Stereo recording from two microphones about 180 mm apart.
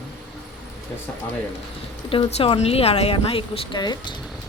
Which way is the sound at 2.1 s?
30° left (ahead or behind).